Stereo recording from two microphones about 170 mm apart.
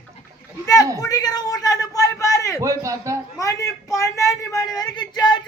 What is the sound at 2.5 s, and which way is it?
Speech, 20° right (ahead or behind).